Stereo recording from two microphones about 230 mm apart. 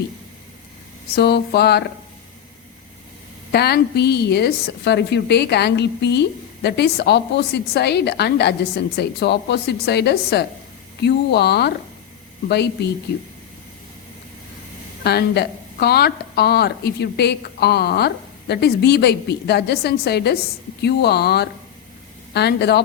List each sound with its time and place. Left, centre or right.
1.1 s a woman's voice: left
3.5 s a woman's voice: left
15.0 s a woman's voice: left